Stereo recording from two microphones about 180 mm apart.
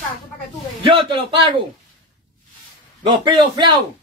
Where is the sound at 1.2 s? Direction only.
30° right (ahead or behind).